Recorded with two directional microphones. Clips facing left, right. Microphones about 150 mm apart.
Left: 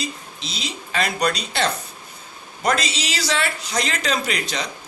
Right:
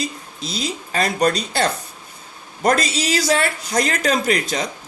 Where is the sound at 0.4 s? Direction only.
45° right (ahead or behind).